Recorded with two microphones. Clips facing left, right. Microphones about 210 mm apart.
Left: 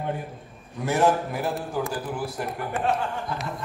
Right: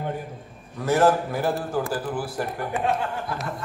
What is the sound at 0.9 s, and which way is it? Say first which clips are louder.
A man's voice: right 2 dB; centre (ahead or behind).